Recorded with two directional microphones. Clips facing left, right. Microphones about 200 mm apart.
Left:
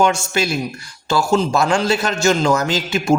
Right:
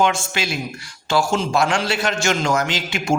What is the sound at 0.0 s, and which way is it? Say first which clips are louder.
A man's voice: left 3 dB; 40° left (ahead or behind).